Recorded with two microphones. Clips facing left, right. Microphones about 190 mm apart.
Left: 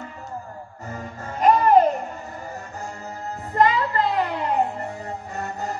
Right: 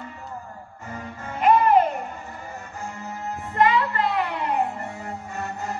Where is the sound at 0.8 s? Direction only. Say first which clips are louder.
Left 1 dB; 40° left (ahead or behind).